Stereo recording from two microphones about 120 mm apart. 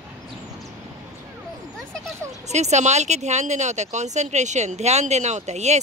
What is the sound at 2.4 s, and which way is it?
A woman's voice, 70° right (ahead or behind).